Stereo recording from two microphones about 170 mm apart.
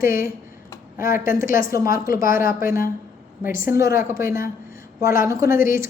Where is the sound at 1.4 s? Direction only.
55° left (ahead or behind).